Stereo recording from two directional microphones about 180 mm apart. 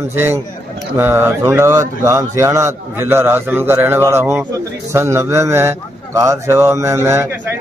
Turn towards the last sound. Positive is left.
turn(degrees=-15)  # may be behind; listen again after turning